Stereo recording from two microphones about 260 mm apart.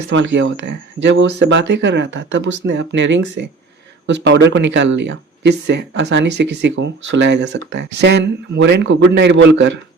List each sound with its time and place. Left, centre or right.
0.1 s speech: right